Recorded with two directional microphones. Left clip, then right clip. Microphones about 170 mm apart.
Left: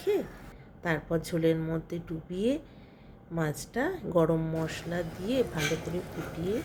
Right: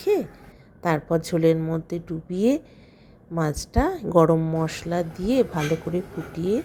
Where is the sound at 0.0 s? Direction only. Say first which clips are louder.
Right 7 dB; 40° right (ahead or behind).